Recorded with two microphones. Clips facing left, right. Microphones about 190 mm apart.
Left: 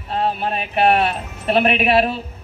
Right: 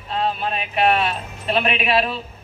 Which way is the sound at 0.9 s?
55° left (ahead or behind).